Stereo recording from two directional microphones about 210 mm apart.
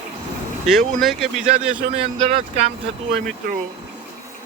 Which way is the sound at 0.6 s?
Centre (ahead or behind).